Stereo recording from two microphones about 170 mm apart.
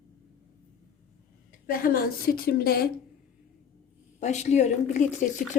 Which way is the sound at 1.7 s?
60° left (ahead or behind).